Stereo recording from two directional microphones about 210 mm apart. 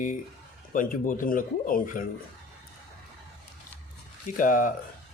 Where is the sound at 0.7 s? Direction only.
40° left (ahead or behind).